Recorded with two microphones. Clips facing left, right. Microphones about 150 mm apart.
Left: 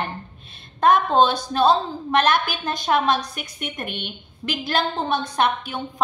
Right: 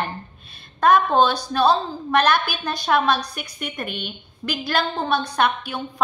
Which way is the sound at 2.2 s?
50° left (ahead or behind).